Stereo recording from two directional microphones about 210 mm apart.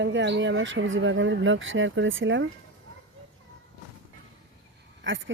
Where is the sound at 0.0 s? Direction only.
60° right (ahead or behind).